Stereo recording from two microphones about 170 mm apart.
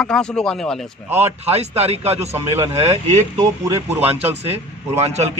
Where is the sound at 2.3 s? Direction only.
15° right (ahead or behind).